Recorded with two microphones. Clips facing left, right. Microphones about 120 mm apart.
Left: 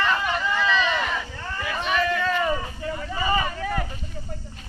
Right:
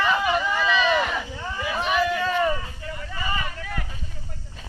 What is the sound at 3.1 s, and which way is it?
Vehicle, 30° left (ahead or behind).